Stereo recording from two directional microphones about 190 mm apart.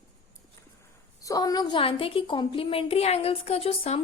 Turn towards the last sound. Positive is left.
turn(degrees=30)  # may be behind; listen again after turning